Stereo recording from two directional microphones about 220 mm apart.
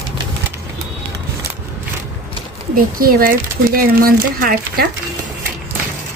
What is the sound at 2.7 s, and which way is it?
Speech, 40° right (ahead or behind).